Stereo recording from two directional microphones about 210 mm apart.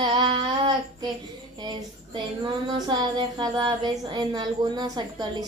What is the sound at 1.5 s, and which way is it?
A woman's voice, 20° right (ahead or behind).